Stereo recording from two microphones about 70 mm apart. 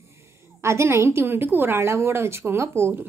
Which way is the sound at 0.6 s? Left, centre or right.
Right.